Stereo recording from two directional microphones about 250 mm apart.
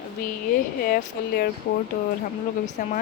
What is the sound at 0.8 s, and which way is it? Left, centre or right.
Speech, left.